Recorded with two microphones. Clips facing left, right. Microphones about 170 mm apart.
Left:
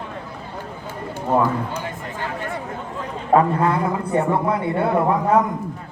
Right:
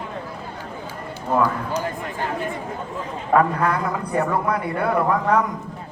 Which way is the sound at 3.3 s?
25° left (ahead or behind).